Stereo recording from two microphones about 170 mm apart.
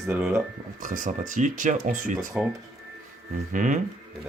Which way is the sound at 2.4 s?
5° right (ahead or behind).